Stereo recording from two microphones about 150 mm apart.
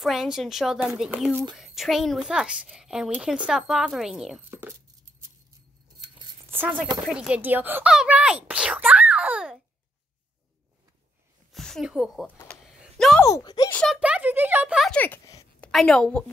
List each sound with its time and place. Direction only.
0.0 s a woman's voice: centre (ahead or behind)
4.4 s speech: 15° right (ahead or behind)
5.9 s a sound: 30° right (ahead or behind)
6.5 s a woman's voice: 10° right (ahead or behind)
11.5 s speech: centre (ahead or behind)
12.4 s a sound: 5° left (ahead or behind)
13.2 s speech: 25° left (ahead or behind)
13.7 s speech: 10° left (ahead or behind)
13.9 s speech: 10° right (ahead or behind)
14.9 s a woman's voice: 10° left (ahead or behind)